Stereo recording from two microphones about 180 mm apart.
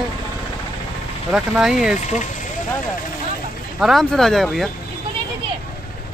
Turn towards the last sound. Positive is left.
turn(degrees=0)  # may be behind; listen again after turning